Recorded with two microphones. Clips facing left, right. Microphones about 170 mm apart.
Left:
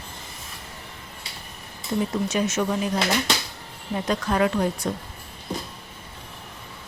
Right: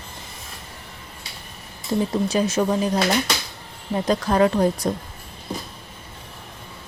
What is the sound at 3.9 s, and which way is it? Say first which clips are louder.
Speech: right 4 dB; 35° right (ahead or behind).